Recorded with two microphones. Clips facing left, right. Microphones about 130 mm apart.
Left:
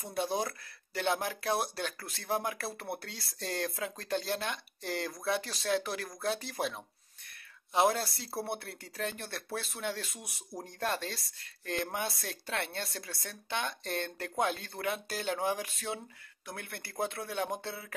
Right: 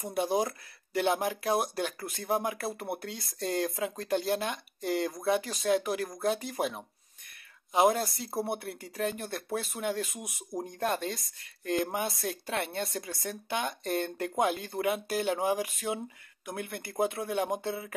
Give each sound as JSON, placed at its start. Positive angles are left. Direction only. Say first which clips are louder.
{"t": 0.0, "sound": "speech", "louder": "right 4 dB", "side_deg": -15}
{"t": 1.0, "sound": "speech", "louder": "right 3 dB", "side_deg": -5}
{"t": 8.5, "sound": "speech", "louder": "right 4 dB", "side_deg": -10}